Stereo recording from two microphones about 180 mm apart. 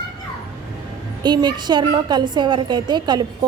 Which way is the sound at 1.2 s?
25° right (ahead or behind).